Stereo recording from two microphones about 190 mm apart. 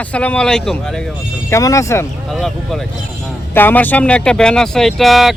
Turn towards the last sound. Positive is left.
turn(degrees=0)  # may be behind; listen again after turning